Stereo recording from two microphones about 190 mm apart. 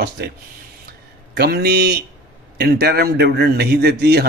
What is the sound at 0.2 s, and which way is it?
A man's voice, 55° right (ahead or behind).